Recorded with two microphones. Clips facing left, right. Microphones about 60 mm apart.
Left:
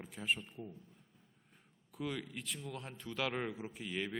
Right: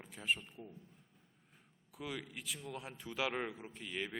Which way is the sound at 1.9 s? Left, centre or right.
Centre.